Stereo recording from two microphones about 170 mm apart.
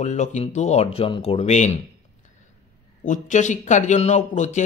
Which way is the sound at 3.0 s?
45° left (ahead or behind).